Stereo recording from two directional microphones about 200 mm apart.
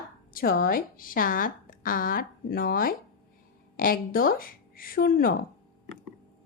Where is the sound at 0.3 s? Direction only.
45° left (ahead or behind).